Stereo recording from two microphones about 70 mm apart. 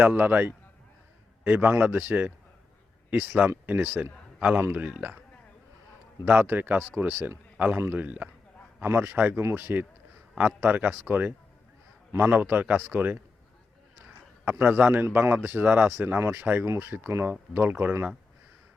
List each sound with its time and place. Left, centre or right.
0.0 s a man's voice: right
6.2 s speech: right
8.8 s speech: right
14.4 s speech: right